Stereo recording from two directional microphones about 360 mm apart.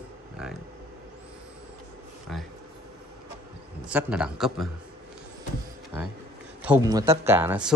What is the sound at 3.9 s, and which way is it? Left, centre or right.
Speech, centre.